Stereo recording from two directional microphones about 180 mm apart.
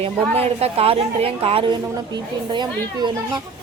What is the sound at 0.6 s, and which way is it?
A woman's voice, 35° right (ahead or behind).